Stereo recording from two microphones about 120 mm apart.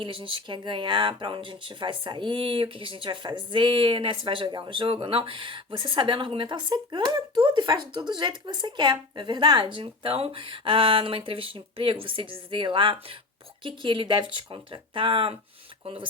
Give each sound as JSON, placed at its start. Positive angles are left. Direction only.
{"t": 0.0, "sound": "speech", "side_deg": -45}